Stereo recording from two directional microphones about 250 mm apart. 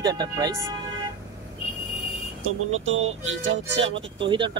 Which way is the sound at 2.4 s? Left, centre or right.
Right.